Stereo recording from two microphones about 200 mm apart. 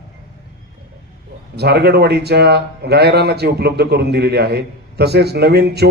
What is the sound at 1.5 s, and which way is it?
A man's voice, 55° right (ahead or behind).